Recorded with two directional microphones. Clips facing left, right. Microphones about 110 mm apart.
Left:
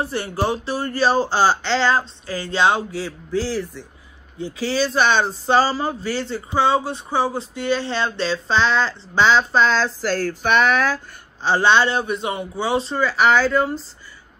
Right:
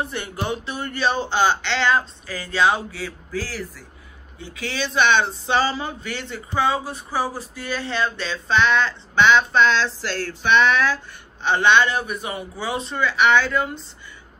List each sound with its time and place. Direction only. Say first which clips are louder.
0.0 s speech: left 5 dB; 35° left (ahead or behind)
4.4 s speech: left 7 dB; 35° left (ahead or behind)
11.4 s speech: left 1 dB; 30° left (ahead or behind)